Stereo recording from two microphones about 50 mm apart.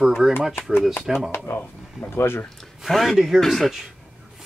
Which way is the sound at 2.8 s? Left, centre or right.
Centre.